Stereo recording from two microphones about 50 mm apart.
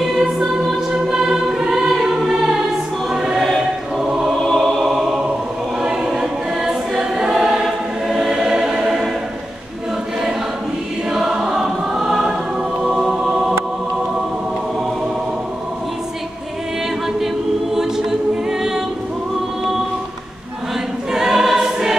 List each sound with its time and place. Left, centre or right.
0.0 s music: centre
3.1 s choir: centre
4.0 s choir: centre
4.4 s music: centre
5.8 s choir: centre
11.1 s choir: centre
17.7 s choir: centre
21.1 s choir: centre